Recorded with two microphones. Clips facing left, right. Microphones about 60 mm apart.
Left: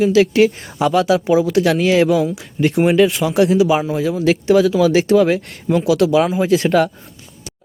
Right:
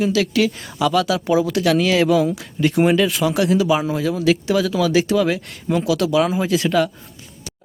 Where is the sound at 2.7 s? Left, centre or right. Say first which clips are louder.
Even; centre.